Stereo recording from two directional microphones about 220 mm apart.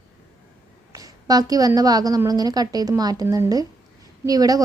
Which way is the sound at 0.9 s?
15° right (ahead or behind).